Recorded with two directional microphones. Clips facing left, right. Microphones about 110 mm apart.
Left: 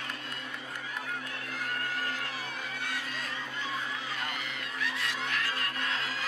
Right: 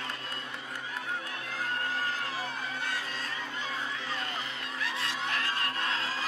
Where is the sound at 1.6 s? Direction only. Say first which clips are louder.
Right 2 dB; 30° right (ahead or behind).